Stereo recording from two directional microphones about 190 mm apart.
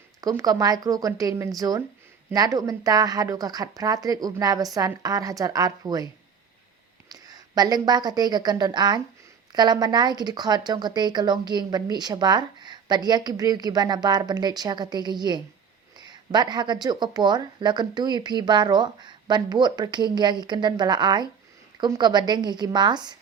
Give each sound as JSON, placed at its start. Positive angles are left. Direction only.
{"t": 0.2, "sound": "a woman's voice", "side_deg": -20}
{"t": 7.1, "sound": "a woman's voice", "side_deg": -20}